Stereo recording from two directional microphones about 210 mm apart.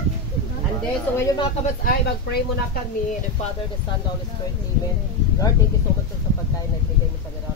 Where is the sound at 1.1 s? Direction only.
20° left (ahead or behind).